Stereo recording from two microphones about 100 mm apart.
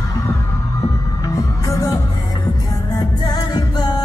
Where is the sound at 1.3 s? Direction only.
35° left (ahead or behind).